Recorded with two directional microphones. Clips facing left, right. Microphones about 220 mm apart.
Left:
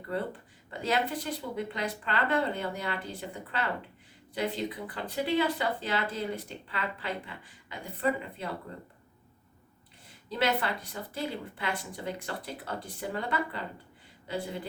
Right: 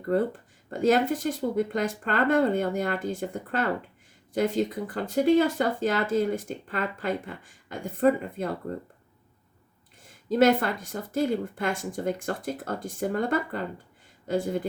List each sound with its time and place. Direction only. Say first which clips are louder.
0.0 s speech: right 9 dB; 45° right (ahead or behind)
10.1 s speech: right 9 dB; 45° right (ahead or behind)